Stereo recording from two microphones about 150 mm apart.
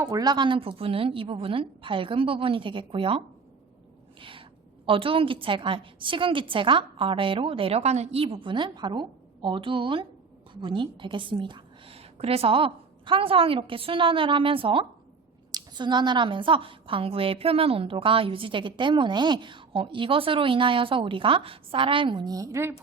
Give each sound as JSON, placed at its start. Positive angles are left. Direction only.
{"t": 0.0, "sound": "a woman's voice", "side_deg": -20}
{"t": 4.2, "sound": "a sound", "side_deg": -35}
{"t": 4.9, "sound": "a woman's voice", "side_deg": -35}